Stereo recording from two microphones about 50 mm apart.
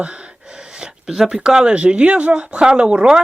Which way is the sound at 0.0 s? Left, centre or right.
Right.